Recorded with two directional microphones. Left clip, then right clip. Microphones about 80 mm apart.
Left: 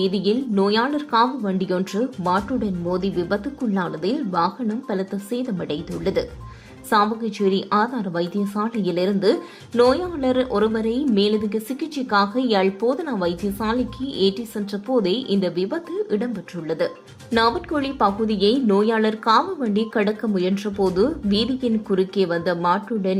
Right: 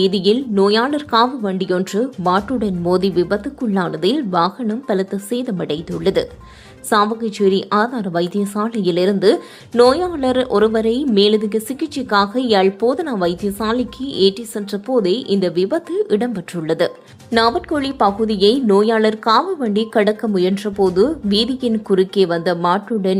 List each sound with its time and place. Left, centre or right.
0.0 s a woman's voice: right
2.9 s speech: right
3.2 s speech: right
3.6 s a woman's voice: right
17.3 s a woman's voice: right